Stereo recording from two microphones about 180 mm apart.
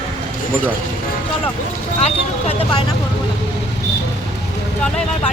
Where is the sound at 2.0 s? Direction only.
35° left (ahead or behind).